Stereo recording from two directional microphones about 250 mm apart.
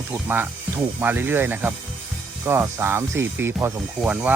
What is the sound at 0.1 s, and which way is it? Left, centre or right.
Speech, centre.